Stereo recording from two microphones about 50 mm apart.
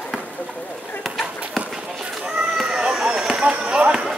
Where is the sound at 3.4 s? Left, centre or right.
Right.